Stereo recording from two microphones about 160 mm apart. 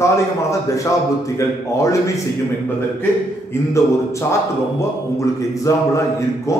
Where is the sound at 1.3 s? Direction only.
20° left (ahead or behind).